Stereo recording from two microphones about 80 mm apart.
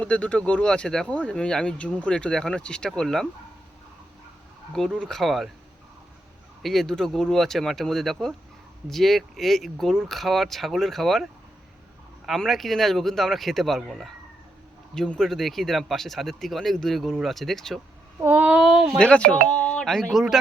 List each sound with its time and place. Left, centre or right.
0.0 s speech: centre
4.9 s speech: centre
6.6 s speech: centre
18.3 s a sound: centre
18.9 s speech: centre